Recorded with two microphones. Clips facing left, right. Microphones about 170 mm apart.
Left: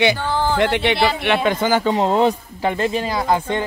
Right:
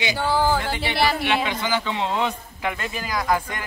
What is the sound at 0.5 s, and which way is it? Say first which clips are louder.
Speech: left 8 dB; 75° left (ahead or behind).